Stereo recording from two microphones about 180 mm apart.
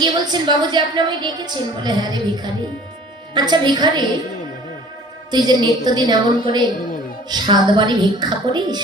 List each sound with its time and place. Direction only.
0.0 s a woman's voice: 25° right (ahead or behind)
5.3 s a woman's voice: 25° right (ahead or behind)